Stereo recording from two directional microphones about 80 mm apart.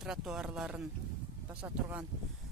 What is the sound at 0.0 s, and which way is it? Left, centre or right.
Speech, centre.